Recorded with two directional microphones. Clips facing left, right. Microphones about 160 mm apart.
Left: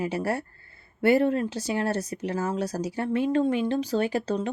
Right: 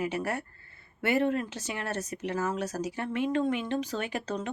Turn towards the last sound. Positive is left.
turn(degrees=35)  # may be behind; listen again after turning